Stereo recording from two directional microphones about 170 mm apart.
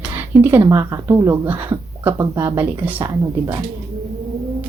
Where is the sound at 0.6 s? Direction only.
20° right (ahead or behind).